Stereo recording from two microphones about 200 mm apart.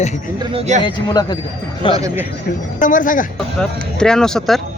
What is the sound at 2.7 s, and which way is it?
Speech, 40° left (ahead or behind).